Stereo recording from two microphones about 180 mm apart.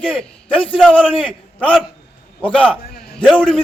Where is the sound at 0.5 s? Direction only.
30° left (ahead or behind).